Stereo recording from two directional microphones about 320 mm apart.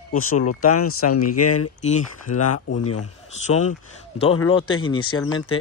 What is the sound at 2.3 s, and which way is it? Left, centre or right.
Speech, left.